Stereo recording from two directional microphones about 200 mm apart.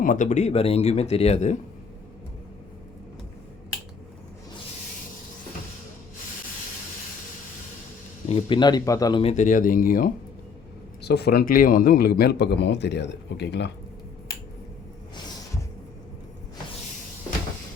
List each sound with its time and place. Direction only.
0.0 s speech: 40° left (ahead or behind)
8.3 s speech: 25° left (ahead or behind)
9.2 s a man's voice: 35° left (ahead or behind); by 13.7 s 60° left (ahead or behind)